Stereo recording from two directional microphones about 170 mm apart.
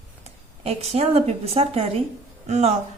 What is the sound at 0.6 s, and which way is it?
A woman's voice, 40° right (ahead or behind).